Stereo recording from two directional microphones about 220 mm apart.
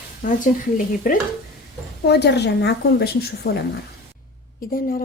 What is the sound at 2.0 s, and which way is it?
A woman's voice, 50° left (ahead or behind).